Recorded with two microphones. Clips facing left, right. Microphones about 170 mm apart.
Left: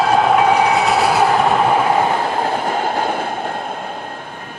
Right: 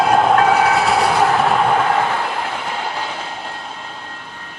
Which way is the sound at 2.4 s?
45° left (ahead or behind).